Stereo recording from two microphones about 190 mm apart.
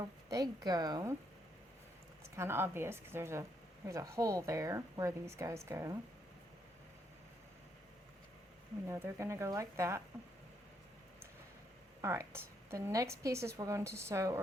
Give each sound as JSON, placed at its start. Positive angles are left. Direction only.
{"t": 0.0, "sound": "a woman's voice", "side_deg": -20}
{"t": 2.3, "sound": "a woman's voice", "side_deg": -15}
{"t": 8.9, "sound": "a woman's voice", "side_deg": -15}
{"t": 12.0, "sound": "a woman's voice", "side_deg": -15}